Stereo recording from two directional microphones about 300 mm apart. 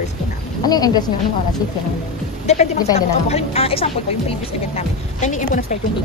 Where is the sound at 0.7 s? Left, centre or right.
Centre.